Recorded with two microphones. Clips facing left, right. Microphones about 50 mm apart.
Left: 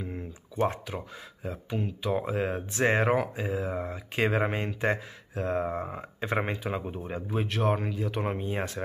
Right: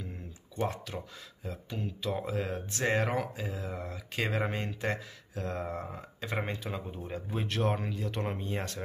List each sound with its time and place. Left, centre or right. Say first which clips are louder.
0.0 s a sound: left 7 dB; left
0.8 s speech: left 4 dB; left
7.2 s speech: left 4 dB; centre; by 8.8 s left